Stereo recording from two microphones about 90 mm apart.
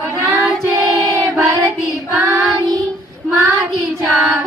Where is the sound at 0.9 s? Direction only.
40° right (ahead or behind).